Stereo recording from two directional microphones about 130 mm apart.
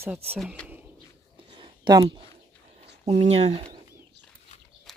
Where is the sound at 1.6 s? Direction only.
35° right (ahead or behind).